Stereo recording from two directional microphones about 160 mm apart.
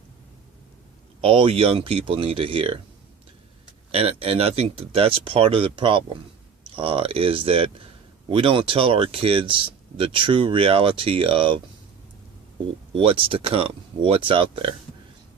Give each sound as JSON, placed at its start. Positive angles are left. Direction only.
{"t": 1.2, "sound": "speech", "side_deg": -35}
{"t": 3.9, "sound": "speech", "side_deg": -35}
{"t": 12.9, "sound": "speech", "side_deg": -35}